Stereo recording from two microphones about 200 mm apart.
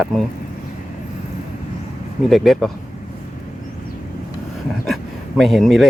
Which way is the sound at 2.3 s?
Centre (ahead or behind).